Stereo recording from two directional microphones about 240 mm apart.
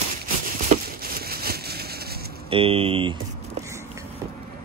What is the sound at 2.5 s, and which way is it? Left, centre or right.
Speech, right.